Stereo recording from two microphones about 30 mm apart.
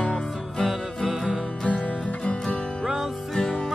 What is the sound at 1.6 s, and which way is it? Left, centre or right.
Music, left.